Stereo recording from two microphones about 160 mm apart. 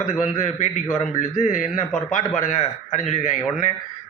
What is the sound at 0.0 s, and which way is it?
A man's voice, 55° left (ahead or behind).